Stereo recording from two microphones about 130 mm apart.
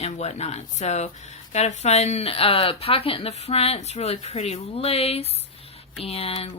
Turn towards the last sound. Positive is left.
turn(degrees=50)  # may be behind; listen again after turning